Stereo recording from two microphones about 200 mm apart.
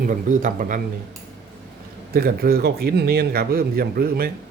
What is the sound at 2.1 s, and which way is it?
Speech, 50° right (ahead or behind).